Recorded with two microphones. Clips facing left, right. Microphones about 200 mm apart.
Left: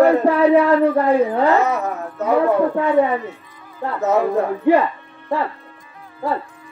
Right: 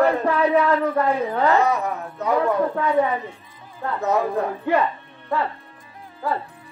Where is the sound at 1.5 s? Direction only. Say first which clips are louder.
Left 2 dB; 15° right (ahead or behind).